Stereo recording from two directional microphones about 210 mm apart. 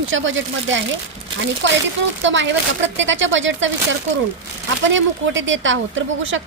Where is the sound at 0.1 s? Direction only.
65° right (ahead or behind).